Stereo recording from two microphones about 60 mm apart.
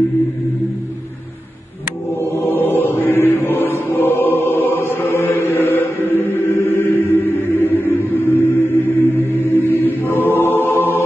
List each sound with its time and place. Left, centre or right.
2.4 s chant: left